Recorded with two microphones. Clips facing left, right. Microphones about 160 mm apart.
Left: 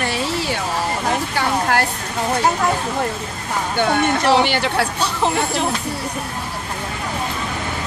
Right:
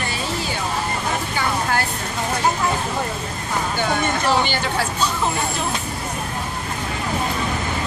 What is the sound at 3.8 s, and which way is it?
Speech, 65° left (ahead or behind).